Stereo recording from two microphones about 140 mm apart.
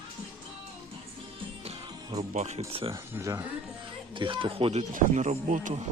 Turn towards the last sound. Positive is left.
turn(degrees=-60)  # may be behind; listen again after turning